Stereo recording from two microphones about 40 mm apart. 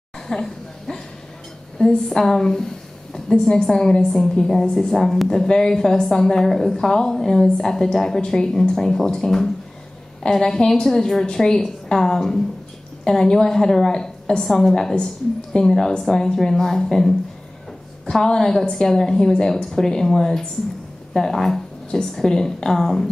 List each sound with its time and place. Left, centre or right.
0.3 s speech: centre
1.8 s a woman's voice: left
18.1 s a woman's voice: centre